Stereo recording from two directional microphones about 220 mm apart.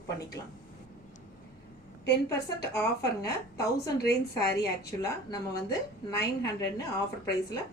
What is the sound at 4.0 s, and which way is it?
Speech, 45° left (ahead or behind).